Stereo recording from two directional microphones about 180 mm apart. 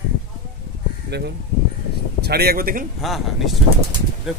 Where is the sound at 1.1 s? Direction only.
70° right (ahead or behind); by 2.9 s 50° right (ahead or behind).